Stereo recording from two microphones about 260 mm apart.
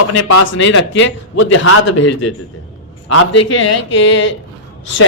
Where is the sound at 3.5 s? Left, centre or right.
Left.